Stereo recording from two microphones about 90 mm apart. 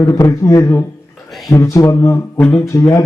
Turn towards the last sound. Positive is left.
turn(degrees=35)  # may be behind; listen again after turning